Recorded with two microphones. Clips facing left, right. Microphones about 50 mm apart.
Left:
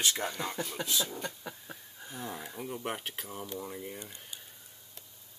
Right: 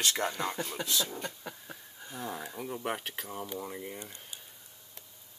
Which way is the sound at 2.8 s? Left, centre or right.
Right.